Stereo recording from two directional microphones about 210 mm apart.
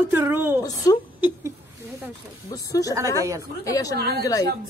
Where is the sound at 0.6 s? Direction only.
15° left (ahead or behind).